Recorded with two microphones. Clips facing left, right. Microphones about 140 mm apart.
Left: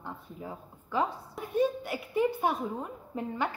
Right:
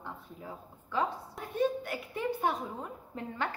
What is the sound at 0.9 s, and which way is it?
A woman's voice, 10° left (ahead or behind).